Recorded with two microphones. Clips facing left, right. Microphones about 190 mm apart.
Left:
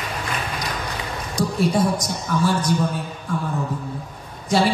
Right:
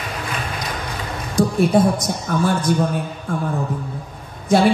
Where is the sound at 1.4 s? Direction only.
55° right (ahead or behind).